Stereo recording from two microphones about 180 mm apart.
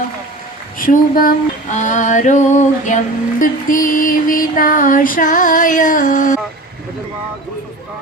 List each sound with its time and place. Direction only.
0.8 s female singing: 50° left (ahead or behind)